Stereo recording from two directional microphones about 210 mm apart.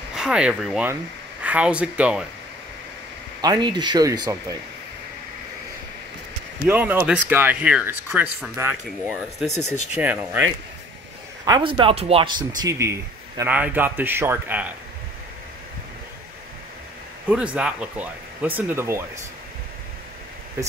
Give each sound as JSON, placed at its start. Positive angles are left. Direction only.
{"t": 0.1, "sound": "speech", "side_deg": -5}
{"t": 3.3, "sound": "speech", "side_deg": -20}
{"t": 6.7, "sound": "speech", "side_deg": -10}
{"t": 11.4, "sound": "speech", "side_deg": -20}
{"t": 17.3, "sound": "speech", "side_deg": -5}